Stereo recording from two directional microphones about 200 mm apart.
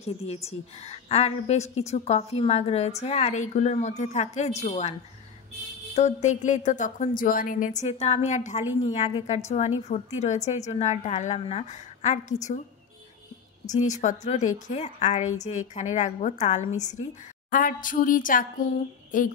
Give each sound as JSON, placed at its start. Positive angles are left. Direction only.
{"t": 0.0, "sound": "a woman's voice", "side_deg": 30}
{"t": 5.9, "sound": "a woman's voice", "side_deg": 35}
{"t": 13.7, "sound": "a woman's voice", "side_deg": 35}